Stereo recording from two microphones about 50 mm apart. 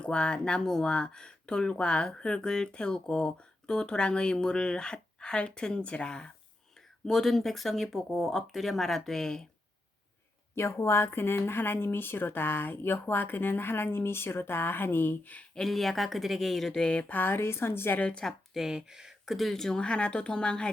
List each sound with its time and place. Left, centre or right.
0.0 s speech: centre
7.1 s speech: centre
10.5 s speech: left
15.5 s speech: centre
16.8 s speech: centre
17.1 s speech: left
17.9 s speech: left
18.5 s speech: centre
19.8 s speech: left